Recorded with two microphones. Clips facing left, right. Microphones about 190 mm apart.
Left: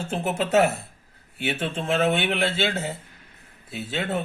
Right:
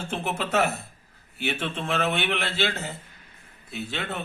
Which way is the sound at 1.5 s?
30° left (ahead or behind).